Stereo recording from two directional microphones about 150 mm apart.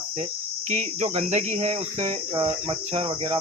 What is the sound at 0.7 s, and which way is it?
Cricket, 50° right (ahead or behind).